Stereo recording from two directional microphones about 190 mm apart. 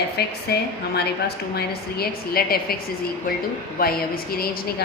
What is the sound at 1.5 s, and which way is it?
A woman's voice, 55° left (ahead or behind).